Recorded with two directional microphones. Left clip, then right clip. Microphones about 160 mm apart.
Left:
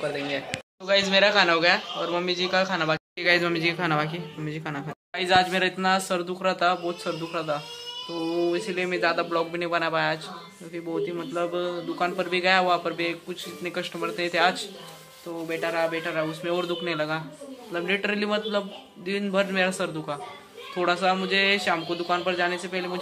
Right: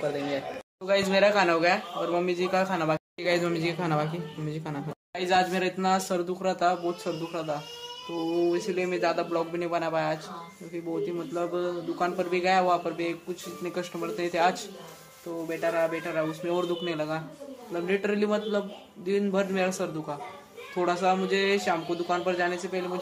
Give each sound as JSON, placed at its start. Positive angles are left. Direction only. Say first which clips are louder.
{"t": 0.0, "sound": "a man's voice", "louder": "left 1 dB", "side_deg": -10}
{"t": 20.8, "sound": "a man's voice", "louder": "left 2 dB", "side_deg": -10}